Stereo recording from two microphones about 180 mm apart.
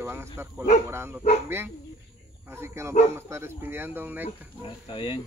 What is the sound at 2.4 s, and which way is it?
Speech, 15° right (ahead or behind).